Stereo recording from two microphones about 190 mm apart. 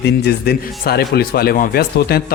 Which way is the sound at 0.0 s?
55° left (ahead or behind).